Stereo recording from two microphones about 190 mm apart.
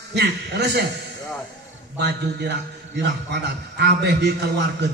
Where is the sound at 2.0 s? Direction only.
60° right (ahead or behind).